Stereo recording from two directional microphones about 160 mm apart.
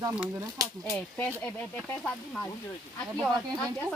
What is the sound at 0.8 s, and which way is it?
Speech, 10° left (ahead or behind).